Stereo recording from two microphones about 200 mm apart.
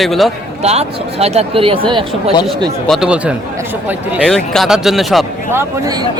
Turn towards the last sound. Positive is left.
turn(degrees=-10)  # may be behind; listen again after turning